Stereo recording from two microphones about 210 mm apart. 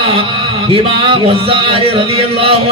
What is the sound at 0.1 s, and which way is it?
Speech, 25° right (ahead or behind).